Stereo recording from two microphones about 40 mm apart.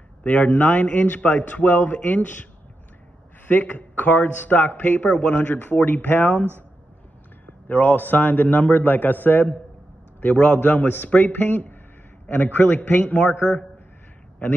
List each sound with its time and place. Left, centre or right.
0.5 s a man's voice: left
3.4 s a man's voice: left
7.6 s a man's voice: left
10.3 s speech: left
10.6 s a man's voice: left
13.3 s speech: left